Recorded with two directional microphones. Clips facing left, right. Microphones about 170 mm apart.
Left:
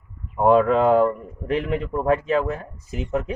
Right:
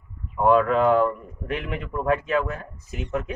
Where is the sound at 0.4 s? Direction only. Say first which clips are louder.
Left 2 dB; 30° left (ahead or behind).